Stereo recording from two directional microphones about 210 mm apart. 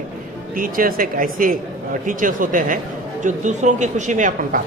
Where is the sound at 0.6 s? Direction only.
40° right (ahead or behind).